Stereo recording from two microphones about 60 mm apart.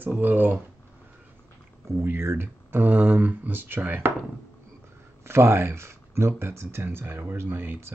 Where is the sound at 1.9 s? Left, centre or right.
Right.